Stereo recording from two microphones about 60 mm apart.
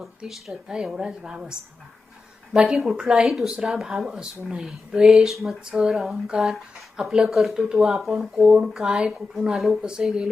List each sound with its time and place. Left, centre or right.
0.5 s a woman's voice: centre
2.6 s a woman's voice: centre
9.6 s a woman's voice: centre